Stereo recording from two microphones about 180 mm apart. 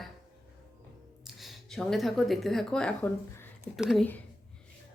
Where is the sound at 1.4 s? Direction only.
Centre (ahead or behind).